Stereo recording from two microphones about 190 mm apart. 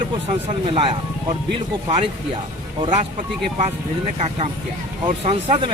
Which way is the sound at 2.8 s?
35° right (ahead or behind).